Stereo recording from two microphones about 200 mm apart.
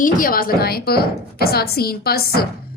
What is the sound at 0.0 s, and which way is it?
A woman's voice, 45° left (ahead or behind).